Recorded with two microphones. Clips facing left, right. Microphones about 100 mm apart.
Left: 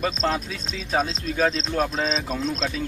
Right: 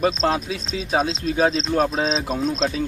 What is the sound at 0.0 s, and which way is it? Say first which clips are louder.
Speech: right 4 dB; 45° right (ahead or behind).